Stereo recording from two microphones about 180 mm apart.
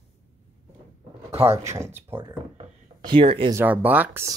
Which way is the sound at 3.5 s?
10° right (ahead or behind).